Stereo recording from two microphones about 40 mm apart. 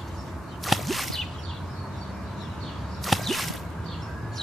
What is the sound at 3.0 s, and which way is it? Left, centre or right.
Whip, centre.